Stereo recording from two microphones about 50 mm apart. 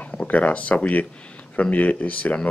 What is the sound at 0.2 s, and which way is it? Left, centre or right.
Speech, left.